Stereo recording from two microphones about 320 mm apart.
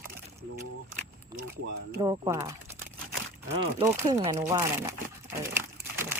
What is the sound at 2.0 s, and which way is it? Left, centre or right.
Speech, centre.